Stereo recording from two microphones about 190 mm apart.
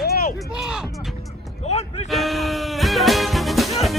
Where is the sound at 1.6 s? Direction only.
35° left (ahead or behind).